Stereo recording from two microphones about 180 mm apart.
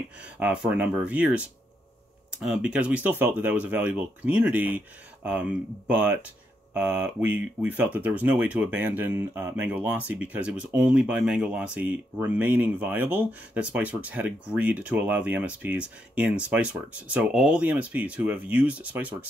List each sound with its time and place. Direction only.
0.2 s speech: 5° right (ahead or behind)